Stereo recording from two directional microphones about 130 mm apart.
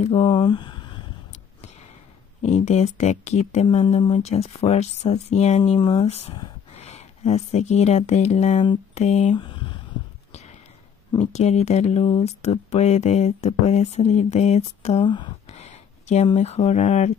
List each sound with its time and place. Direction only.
0.2 s a sound: 35° left (ahead or behind)
2.4 s speech: 60° left (ahead or behind)
5.8 s speech: 35° left (ahead or behind)
6.0 s speech: 55° left (ahead or behind)
9.3 s a sound: 40° left (ahead or behind)
11.1 s speech: 55° left (ahead or behind)
15.0 s speech: 35° left (ahead or behind)
15.4 s a sound: 55° left (ahead or behind)
16.3 s speech: 55° left (ahead or behind)